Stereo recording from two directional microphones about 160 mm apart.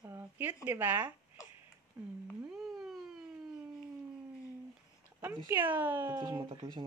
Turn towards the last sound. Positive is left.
turn(degrees=-35)  # may be behind; listen again after turning